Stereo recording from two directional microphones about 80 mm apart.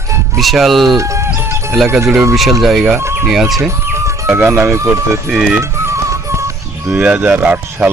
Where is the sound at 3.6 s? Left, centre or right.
Right.